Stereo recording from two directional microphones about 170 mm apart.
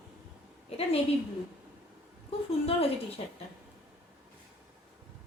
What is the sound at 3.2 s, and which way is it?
Speech, 35° left (ahead or behind).